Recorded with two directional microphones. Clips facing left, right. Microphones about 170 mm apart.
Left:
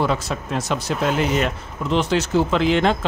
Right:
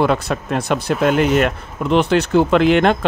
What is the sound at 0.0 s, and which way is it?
Speech, 60° right (ahead or behind).